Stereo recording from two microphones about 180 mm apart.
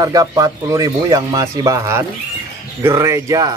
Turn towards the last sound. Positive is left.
turn(degrees=-20)  # may be behind; listen again after turning